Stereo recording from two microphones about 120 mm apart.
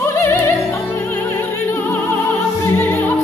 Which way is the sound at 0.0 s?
20° left (ahead or behind).